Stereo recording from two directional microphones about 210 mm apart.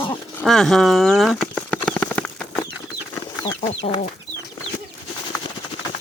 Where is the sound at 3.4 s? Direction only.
25° left (ahead or behind).